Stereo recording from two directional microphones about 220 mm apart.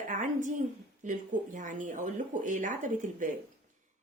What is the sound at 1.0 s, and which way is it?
Speech, 35° right (ahead or behind).